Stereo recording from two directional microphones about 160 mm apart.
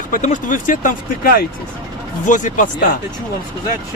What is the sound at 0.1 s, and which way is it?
Speech, 50° left (ahead or behind).